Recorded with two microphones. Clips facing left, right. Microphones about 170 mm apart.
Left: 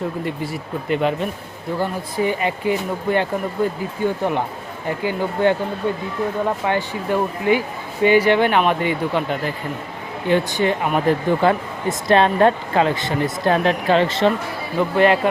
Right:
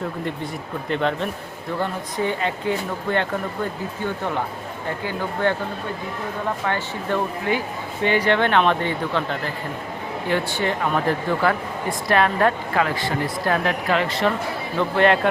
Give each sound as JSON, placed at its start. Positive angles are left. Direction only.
{"t": 0.9, "sound": "a man's voice", "side_deg": 5}
{"t": 6.7, "sound": "speech", "side_deg": 15}
{"t": 14.8, "sound": "a man's voice", "side_deg": 5}